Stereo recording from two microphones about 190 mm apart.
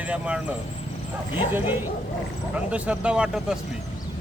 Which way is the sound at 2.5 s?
5° right (ahead or behind).